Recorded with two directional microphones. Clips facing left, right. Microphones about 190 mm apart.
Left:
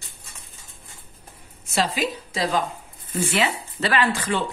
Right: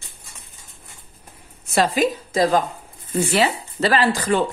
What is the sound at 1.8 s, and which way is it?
Speech, 45° right (ahead or behind).